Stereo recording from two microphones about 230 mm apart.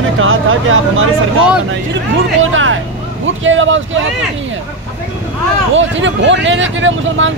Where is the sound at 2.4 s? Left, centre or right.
Right.